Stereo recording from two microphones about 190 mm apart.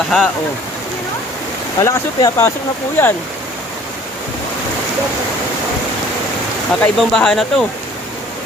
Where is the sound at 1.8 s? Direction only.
15° left (ahead or behind).